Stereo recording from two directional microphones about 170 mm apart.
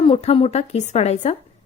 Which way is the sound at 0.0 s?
35° left (ahead or behind).